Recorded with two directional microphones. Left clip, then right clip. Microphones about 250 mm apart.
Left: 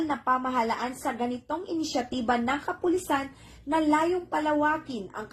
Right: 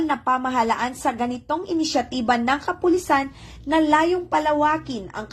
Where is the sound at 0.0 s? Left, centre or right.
Right.